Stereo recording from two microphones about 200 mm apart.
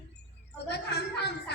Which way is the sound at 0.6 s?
55° left (ahead or behind).